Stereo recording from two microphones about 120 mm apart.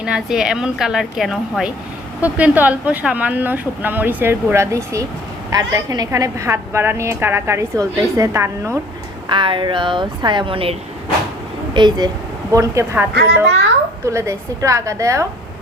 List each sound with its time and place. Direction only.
0.0 s a woman's voice: 5° right (ahead or behind); by 8.8 s 20° right (ahead or behind)
9.3 s a woman's voice: 45° right (ahead or behind)
11.7 s a woman's voice: 40° right (ahead or behind)